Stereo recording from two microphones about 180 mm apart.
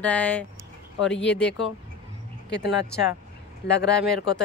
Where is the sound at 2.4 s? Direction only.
70° left (ahead or behind).